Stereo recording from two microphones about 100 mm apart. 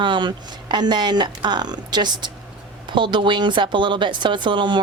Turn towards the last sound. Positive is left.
turn(degrees=-55)  # may be behind; listen again after turning